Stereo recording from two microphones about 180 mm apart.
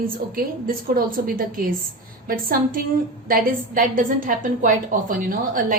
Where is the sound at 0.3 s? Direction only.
55° right (ahead or behind).